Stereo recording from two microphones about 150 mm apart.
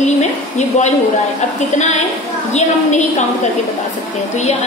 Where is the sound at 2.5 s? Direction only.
50° left (ahead or behind).